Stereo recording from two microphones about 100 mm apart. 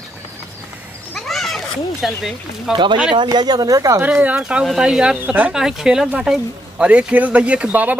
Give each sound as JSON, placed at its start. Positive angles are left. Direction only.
{"t": 1.1, "sound": "a sound", "side_deg": 0}
{"t": 2.7, "sound": "speech", "side_deg": -50}
{"t": 4.0, "sound": "speech", "side_deg": -15}